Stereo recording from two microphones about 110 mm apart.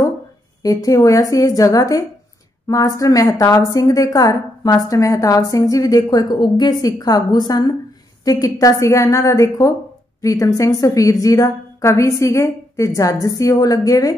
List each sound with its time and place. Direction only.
0.6 s a woman's voice: 35° left (ahead or behind)